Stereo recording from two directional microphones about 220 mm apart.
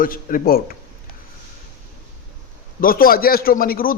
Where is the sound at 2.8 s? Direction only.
40° left (ahead or behind).